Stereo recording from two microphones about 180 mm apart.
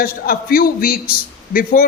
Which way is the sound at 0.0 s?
55° left (ahead or behind).